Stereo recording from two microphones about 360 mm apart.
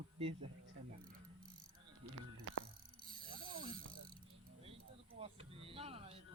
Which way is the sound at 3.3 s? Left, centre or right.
Centre.